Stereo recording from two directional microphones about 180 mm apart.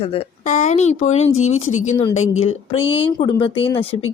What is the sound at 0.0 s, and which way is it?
A woman's voice, 30° left (ahead or behind).